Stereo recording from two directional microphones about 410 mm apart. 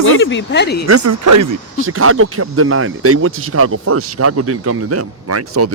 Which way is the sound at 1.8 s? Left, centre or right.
Right.